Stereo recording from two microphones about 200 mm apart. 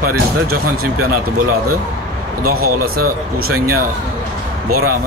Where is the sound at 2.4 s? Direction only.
45° right (ahead or behind).